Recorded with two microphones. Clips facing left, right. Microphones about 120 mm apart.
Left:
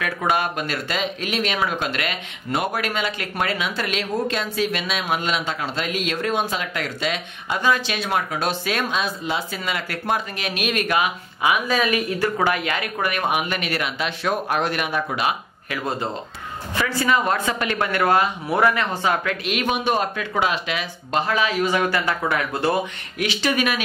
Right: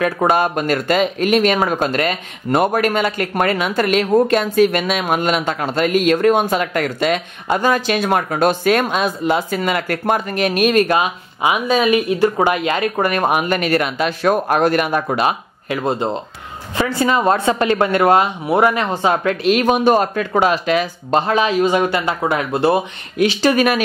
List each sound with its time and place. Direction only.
0.0 s speech: 40° right (ahead or behind)
15.7 s speech: 30° right (ahead or behind)
21.3 s speech: 25° right (ahead or behind)
23.4 s speech: 45° right (ahead or behind)